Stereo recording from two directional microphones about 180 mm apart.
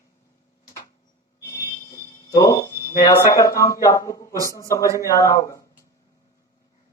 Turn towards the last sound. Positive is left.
turn(degrees=20)  # may be behind; listen again after turning